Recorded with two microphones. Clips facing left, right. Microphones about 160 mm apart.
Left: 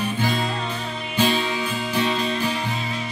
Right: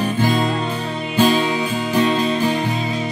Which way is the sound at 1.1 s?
45° right (ahead or behind).